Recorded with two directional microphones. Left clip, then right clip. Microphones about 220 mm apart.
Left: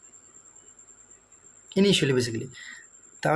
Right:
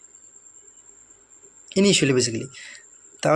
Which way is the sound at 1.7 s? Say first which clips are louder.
Right 3 dB; 20° right (ahead or behind).